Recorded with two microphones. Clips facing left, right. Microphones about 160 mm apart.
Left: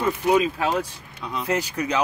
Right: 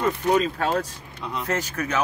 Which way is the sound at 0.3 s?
10° left (ahead or behind).